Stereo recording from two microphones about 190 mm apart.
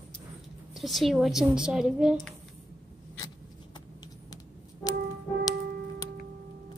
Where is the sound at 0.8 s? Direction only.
Centre (ahead or behind).